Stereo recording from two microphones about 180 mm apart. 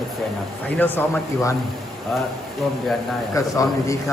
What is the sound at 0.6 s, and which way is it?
Speech, 10° left (ahead or behind).